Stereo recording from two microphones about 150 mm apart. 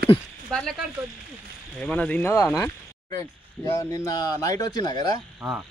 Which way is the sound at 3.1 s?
20° left (ahead or behind).